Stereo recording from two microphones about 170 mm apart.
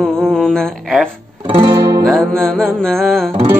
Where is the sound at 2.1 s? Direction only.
Centre (ahead or behind).